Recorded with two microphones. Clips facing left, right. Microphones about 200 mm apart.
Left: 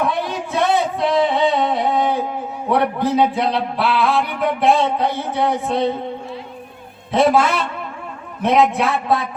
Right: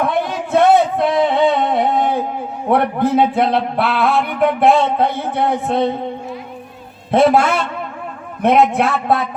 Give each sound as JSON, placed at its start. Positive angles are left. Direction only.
{"t": 0.0, "sound": "singing", "side_deg": -55}
{"t": 2.6, "sound": "a sound", "side_deg": -55}
{"t": 7.1, "sound": "a man's voice", "side_deg": -55}